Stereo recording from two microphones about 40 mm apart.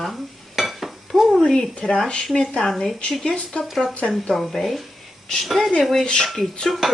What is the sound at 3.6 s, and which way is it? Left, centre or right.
Speech, centre.